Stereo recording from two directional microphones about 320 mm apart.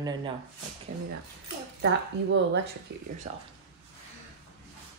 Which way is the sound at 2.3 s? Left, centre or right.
Right.